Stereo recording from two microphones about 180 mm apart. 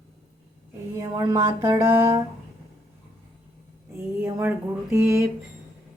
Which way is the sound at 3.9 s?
10° right (ahead or behind).